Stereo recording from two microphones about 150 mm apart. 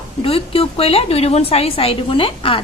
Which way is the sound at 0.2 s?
40° left (ahead or behind).